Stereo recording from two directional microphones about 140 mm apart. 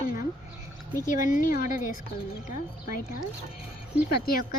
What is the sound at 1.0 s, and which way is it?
Speech, 70° left (ahead or behind).